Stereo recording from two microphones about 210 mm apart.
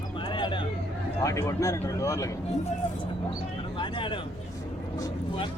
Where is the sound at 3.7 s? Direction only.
25° left (ahead or behind).